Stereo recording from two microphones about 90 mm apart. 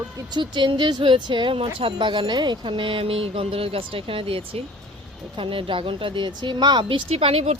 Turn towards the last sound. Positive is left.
turn(degrees=-90)